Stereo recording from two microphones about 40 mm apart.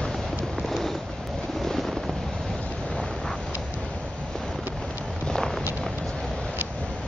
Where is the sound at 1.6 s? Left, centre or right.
Centre.